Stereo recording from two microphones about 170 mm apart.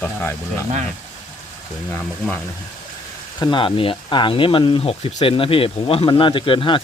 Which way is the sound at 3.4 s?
25° left (ahead or behind).